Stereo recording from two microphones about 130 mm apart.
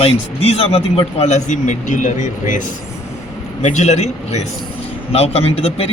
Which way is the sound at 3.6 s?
60° left (ahead or behind).